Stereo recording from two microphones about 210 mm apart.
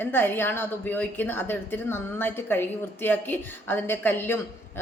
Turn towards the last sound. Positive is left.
turn(degrees=10)  # may be behind; listen again after turning